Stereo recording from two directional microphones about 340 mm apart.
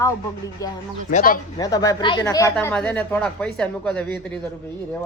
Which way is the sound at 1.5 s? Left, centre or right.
Centre.